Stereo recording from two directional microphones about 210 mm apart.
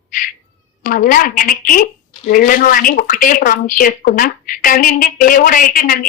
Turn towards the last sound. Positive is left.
turn(degrees=40)  # may be behind; listen again after turning